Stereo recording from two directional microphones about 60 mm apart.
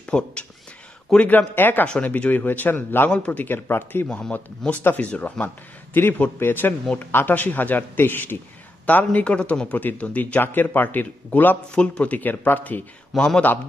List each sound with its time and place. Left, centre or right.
0.1 s speech: centre
1.3 s speech: left
3.1 s speech: left
3.4 s speech: left
4.3 s speech: left
5.9 s speech: left
10.4 s speech: left
13.1 s a man's voice: centre